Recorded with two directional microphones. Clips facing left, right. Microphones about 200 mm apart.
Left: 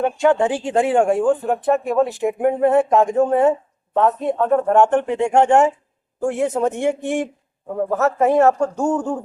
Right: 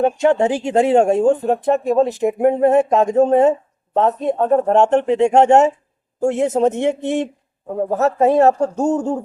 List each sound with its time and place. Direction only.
0.0 s speech: 25° right (ahead or behind)
7.9 s speech: 35° right (ahead or behind)
8.4 s speech: 20° right (ahead or behind)